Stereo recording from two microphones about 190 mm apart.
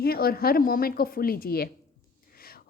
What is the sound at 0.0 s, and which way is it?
A woman's voice, 55° left (ahead or behind).